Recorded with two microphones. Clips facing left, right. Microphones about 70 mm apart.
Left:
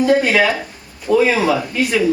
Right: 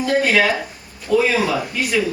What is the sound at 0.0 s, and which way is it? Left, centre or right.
Speech, centre.